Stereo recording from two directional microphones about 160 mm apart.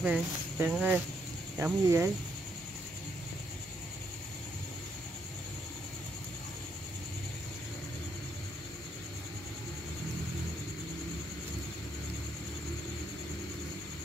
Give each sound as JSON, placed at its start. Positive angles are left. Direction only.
{"t": 0.0, "sound": "speech", "side_deg": -10}